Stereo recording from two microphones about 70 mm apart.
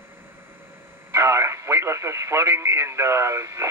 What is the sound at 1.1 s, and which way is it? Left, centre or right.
Speech, right.